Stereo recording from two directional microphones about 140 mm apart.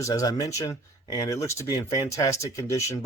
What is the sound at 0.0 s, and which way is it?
Speech, 25° left (ahead or behind).